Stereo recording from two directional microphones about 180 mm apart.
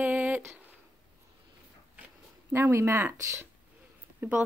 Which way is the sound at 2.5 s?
15° right (ahead or behind).